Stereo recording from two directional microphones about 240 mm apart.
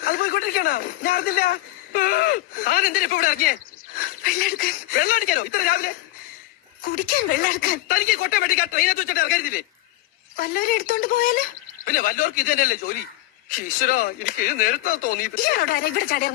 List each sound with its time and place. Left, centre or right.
0.0 s speech: left